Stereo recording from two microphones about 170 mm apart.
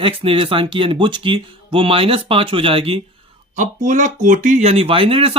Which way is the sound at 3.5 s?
45° right (ahead or behind).